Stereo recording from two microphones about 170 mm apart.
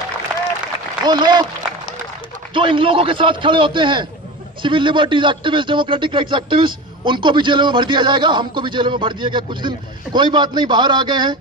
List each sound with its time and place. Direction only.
1.0 s a man's voice: 25° right (ahead or behind)
2.5 s a man's voice: 30° right (ahead or behind)